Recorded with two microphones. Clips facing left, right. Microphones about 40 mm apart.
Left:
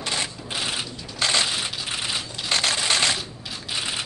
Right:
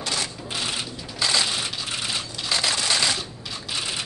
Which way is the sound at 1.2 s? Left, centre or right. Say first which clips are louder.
Left 1 dB; left.